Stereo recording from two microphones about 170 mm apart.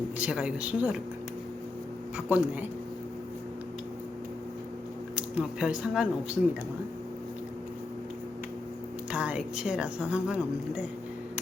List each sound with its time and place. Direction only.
0.2 s a woman's voice: 5° right (ahead or behind)
2.1 s speech: 10° right (ahead or behind)
5.1 s speech: 5° right (ahead or behind)
9.1 s a woman's voice: 5° right (ahead or behind)